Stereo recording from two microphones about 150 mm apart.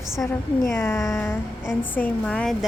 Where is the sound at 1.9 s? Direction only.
10° left (ahead or behind).